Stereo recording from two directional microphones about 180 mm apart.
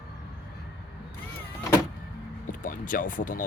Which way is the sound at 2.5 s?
50° left (ahead or behind).